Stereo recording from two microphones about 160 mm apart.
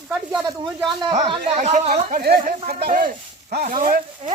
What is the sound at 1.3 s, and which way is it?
Speech, 45° right (ahead or behind).